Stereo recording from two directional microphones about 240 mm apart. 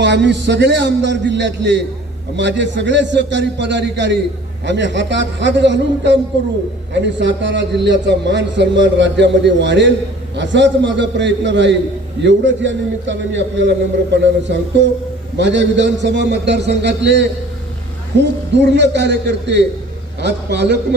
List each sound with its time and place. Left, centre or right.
0.0 s a man's voice: right